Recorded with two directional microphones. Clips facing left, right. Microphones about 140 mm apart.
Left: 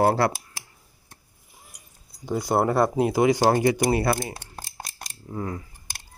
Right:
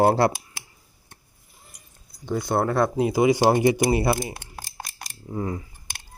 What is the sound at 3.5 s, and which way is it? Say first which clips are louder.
Speech: right 1 dB; 15° right (ahead or behind).